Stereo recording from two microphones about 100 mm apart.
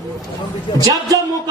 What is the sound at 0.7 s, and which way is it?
Speech, 60° left (ahead or behind).